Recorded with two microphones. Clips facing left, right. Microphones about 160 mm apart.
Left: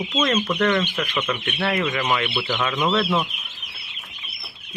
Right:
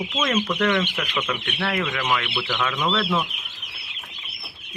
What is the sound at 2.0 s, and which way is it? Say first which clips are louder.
Speech: left 2 dB; 10° left (ahead or behind).